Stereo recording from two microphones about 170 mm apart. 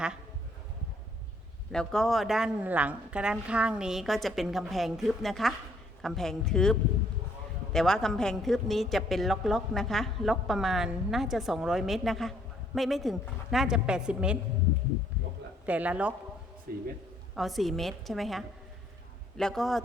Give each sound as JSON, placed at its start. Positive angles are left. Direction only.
{"t": 1.7, "sound": "a woman's voice", "side_deg": 5}
{"t": 15.6, "sound": "speech", "side_deg": -10}
{"t": 16.7, "sound": "speech", "side_deg": -60}
{"t": 17.3, "sound": "a woman's voice", "side_deg": 0}